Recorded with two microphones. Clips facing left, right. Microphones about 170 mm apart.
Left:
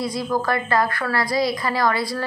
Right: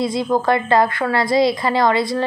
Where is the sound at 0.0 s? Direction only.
25° right (ahead or behind).